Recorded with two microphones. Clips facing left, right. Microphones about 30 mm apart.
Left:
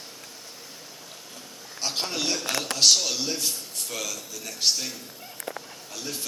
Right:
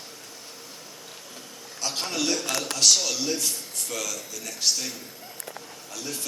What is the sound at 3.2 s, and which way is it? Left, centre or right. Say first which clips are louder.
A man's voice: right 1 dB; centre.